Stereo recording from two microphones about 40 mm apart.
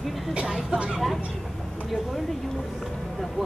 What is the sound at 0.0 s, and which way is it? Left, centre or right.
Vehicle, centre.